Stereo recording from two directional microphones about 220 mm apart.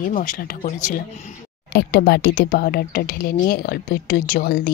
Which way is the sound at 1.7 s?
50° left (ahead or behind).